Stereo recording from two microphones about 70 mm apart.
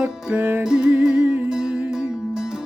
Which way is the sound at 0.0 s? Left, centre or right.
Centre.